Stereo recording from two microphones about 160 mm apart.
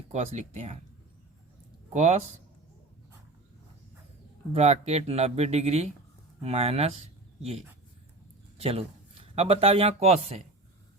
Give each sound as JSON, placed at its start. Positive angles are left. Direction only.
{"t": 0.1, "sound": "speech", "side_deg": -45}
{"t": 1.9, "sound": "speech", "side_deg": -45}
{"t": 4.5, "sound": "speech", "side_deg": -40}
{"t": 8.5, "sound": "speech", "side_deg": -40}